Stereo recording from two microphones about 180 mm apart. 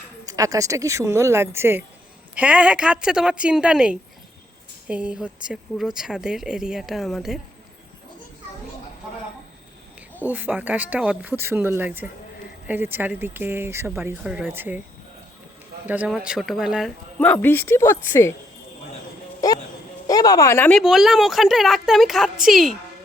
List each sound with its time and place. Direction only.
0.3 s speech: 20° right (ahead or behind); by 7.3 s centre (ahead or behind)
10.2 s speech: 10° right (ahead or behind)
15.9 s speech: 5° right (ahead or behind)
17.2 s speech: 10° left (ahead or behind)
19.4 s music: 20° left (ahead or behind)
20.1 s a woman's voice: 20° left (ahead or behind)
20.7 s speech: centre (ahead or behind)